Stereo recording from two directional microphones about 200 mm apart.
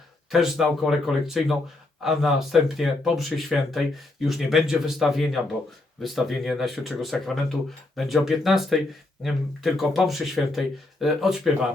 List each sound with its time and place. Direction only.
0.3 s speech: centre (ahead or behind)